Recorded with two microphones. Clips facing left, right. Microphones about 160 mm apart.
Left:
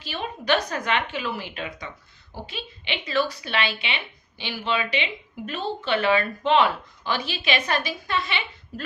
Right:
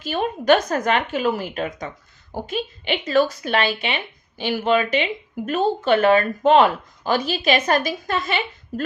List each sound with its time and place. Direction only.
0.0 s speech: 45° right (ahead or behind)